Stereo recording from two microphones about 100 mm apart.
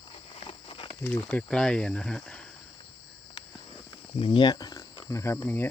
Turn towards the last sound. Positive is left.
turn(degrees=20)  # may be behind; listen again after turning